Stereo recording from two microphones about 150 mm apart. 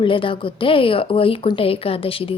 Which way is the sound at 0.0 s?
35° left (ahead or behind).